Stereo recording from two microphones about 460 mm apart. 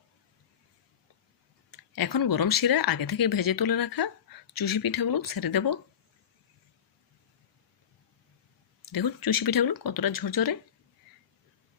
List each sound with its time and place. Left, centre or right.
2.0 s speech: left
8.9 s speech: left